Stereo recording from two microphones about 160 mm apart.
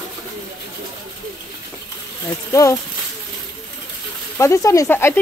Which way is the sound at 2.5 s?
20° left (ahead or behind).